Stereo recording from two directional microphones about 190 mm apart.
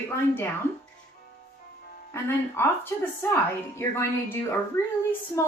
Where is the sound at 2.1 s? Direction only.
15° left (ahead or behind).